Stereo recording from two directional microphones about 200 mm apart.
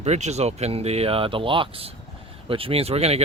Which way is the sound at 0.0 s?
35° right (ahead or behind).